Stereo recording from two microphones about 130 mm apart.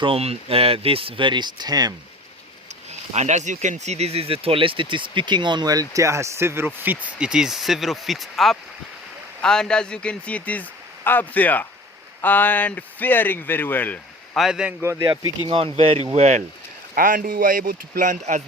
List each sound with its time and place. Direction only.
0.0 s speech: 50° right (ahead or behind); by 1.9 s 30° right (ahead or behind)
2.6 s speech: 60° right (ahead or behind); by 14.0 s 15° left (ahead or behind)
14.3 s speech: 5° right (ahead or behind)
14.8 s speech: 25° right (ahead or behind)
15.4 s speech: 50° right (ahead or behind)
16.9 s speech: 90° right; by 18.4 s 65° right (ahead or behind)